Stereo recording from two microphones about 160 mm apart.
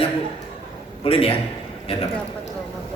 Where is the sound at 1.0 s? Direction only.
35° left (ahead or behind).